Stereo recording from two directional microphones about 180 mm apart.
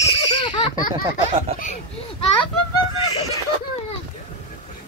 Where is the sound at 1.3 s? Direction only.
35° right (ahead or behind).